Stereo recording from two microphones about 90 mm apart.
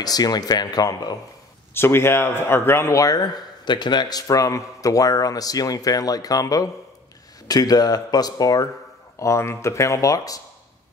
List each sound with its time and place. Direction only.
0.0 s speech: 45° left (ahead or behind)
1.7 s speech: 25° left (ahead or behind); by 4.2 s 55° left (ahead or behind)
4.3 s speech: 40° left (ahead or behind)
9.2 s speech: 35° left (ahead or behind)